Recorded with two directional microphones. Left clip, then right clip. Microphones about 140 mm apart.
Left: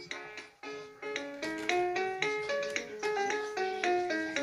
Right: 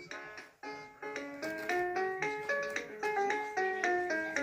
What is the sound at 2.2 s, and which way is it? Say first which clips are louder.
Music: left 2 dB; 30° left (ahead or behind).